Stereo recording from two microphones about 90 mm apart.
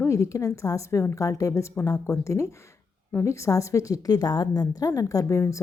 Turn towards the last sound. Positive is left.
turn(degrees=30)  # may be behind; listen again after turning